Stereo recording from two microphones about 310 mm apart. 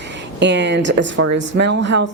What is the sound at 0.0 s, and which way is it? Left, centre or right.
Speech, right.